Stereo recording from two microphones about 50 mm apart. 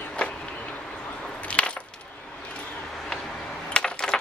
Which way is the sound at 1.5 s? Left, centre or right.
Left.